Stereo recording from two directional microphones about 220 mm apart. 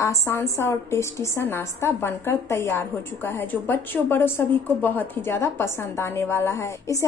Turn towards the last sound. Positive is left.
turn(degrees=15)  # may be behind; listen again after turning